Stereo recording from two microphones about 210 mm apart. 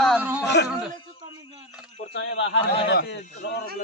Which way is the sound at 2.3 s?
60° left (ahead or behind).